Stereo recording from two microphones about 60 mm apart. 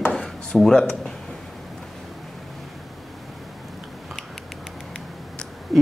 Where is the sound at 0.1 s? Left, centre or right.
Centre.